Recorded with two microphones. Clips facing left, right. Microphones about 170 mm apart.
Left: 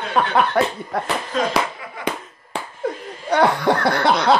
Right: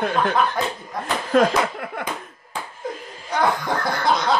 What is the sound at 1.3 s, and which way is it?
Speech, 60° right (ahead or behind).